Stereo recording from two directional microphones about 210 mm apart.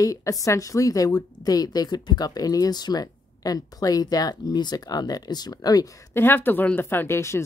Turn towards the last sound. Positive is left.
turn(degrees=10)  # may be behind; listen again after turning